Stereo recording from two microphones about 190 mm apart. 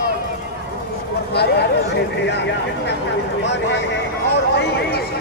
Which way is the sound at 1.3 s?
60° left (ahead or behind).